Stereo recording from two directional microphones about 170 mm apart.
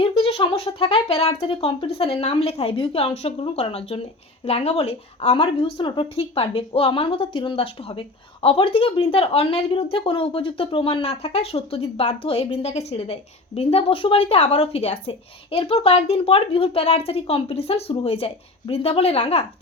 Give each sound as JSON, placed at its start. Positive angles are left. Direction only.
{"t": 0.0, "sound": "a woman's voice", "side_deg": 35}